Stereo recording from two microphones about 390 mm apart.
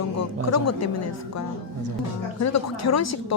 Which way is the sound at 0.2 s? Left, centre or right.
Left.